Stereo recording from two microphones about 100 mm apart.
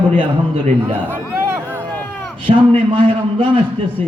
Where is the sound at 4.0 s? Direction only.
90° right.